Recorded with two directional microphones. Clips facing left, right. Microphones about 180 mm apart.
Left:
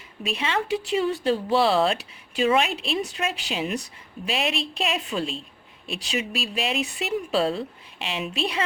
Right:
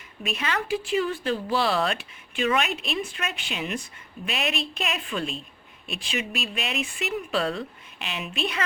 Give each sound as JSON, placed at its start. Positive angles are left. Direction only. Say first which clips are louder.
{"t": 0.3, "sound": "speech", "louder": "left 2 dB", "side_deg": 25}